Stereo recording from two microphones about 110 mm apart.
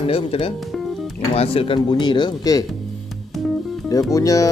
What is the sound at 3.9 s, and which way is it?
Speech, 30° left (ahead or behind).